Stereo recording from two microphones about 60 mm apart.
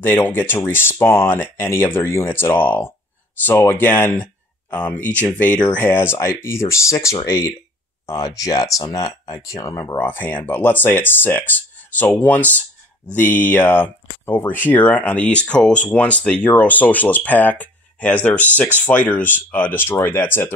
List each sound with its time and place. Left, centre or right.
0.0 s speech: left
5.9 s speech: left
8.1 s speech: left
9.9 s speech: left